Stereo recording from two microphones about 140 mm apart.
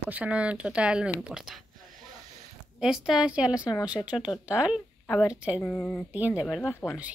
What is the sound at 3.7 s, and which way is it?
Speech, 25° left (ahead or behind).